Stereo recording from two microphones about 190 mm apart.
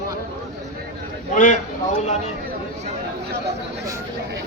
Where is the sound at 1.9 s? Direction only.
35° left (ahead or behind).